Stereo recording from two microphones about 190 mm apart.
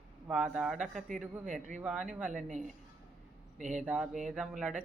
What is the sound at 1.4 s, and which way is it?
Speech, 40° right (ahead or behind).